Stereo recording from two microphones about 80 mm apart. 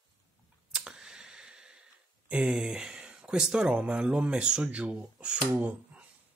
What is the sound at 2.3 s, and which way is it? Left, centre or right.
Speech, centre.